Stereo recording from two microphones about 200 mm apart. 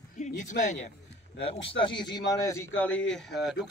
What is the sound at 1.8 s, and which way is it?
Speech, 20° left (ahead or behind).